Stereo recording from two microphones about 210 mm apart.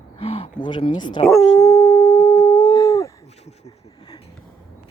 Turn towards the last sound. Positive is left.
turn(degrees=15)  # may be behind; listen again after turning